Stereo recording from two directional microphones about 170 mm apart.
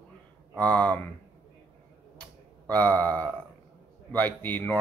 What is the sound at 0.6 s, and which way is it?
Speech, 10° left (ahead or behind).